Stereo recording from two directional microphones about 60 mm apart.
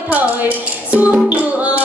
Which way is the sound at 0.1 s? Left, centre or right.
Right.